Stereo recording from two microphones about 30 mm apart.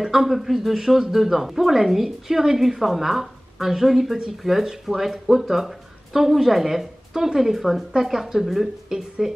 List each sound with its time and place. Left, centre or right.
0.0 s a woman's voice: centre